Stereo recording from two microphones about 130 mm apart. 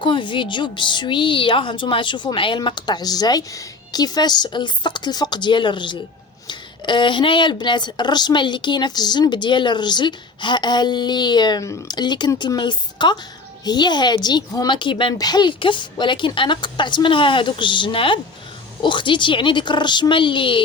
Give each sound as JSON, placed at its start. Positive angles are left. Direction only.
{"t": 0.0, "sound": "speech", "side_deg": 40}